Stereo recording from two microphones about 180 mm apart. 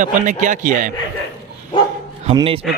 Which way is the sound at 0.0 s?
45° right (ahead or behind).